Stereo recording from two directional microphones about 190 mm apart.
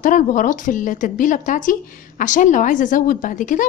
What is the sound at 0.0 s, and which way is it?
A woman's voice, 45° left (ahead or behind).